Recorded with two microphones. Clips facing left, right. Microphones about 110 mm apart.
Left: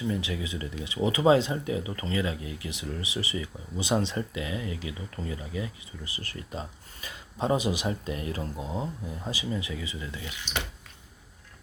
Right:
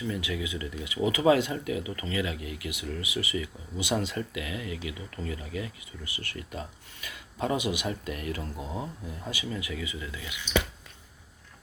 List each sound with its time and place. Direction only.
0.1 s speech: 30° left (ahead or behind)